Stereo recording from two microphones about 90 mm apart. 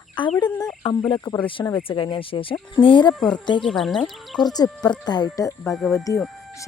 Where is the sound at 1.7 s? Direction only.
75° left (ahead or behind).